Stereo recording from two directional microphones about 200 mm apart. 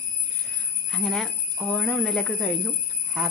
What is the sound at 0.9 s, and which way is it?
Speech, centre (ahead or behind).